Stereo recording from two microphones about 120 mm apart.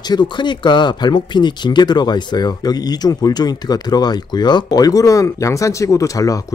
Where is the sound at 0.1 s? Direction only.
40° left (ahead or behind).